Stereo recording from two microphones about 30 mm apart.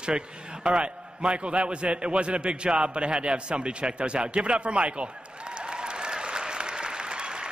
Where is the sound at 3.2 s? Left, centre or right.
Right.